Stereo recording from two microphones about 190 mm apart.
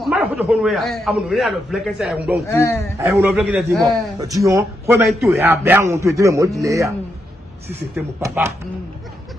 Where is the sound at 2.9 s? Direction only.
15° right (ahead or behind).